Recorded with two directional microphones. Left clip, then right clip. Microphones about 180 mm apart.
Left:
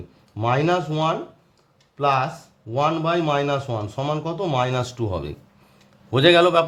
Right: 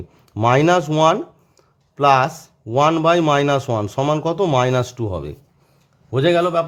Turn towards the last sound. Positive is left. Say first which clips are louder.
# left 1 dB
turn(degrees=-20)  # may be behind; listen again after turning